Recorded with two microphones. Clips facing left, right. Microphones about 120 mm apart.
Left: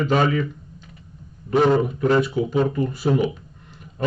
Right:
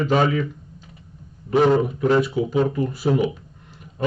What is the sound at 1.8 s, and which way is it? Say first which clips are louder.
Speech: even; centre (ahead or behind).